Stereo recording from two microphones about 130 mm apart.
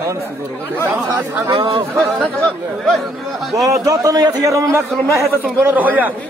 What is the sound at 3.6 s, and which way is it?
A man's voice, 25° right (ahead or behind).